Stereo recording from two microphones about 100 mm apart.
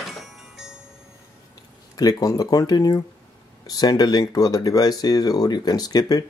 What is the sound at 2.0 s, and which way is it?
Speech, 40° left (ahead or behind).